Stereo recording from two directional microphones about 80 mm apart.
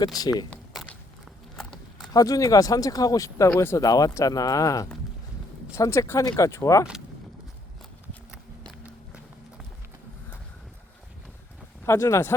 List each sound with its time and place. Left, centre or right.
0.0 s speech: left
2.1 s speech: left
11.9 s speech: left